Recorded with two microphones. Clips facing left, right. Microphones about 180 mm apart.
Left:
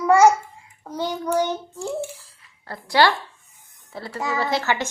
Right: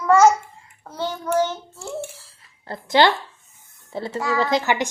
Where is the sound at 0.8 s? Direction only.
15° left (ahead or behind).